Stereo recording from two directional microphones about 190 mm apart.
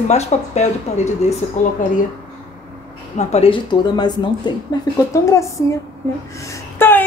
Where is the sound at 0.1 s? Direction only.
35° left (ahead or behind).